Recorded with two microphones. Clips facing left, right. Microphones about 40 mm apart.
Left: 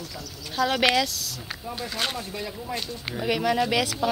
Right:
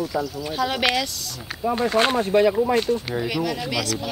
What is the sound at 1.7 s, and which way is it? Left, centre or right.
Speech, right.